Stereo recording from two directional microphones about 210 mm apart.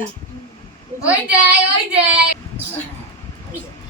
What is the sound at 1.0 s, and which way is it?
Speech, 5° right (ahead or behind).